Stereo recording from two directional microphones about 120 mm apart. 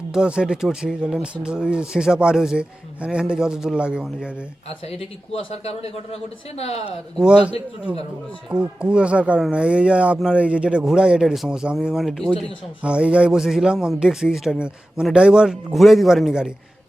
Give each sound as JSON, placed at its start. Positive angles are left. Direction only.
{"t": 0.1, "sound": "speech", "side_deg": -5}
{"t": 4.9, "sound": "a man's voice", "side_deg": 55}
{"t": 7.2, "sound": "a man's voice", "side_deg": -5}